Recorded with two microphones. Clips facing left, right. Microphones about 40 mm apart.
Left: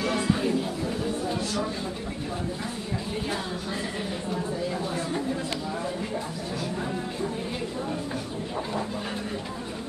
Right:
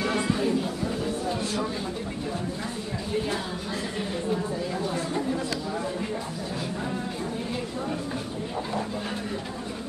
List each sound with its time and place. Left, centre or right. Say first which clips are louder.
0.0 s chatter: even; centre
0.3 s chatter: even; centre